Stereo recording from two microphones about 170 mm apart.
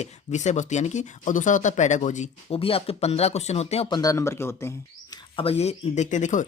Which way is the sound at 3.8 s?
25° left (ahead or behind).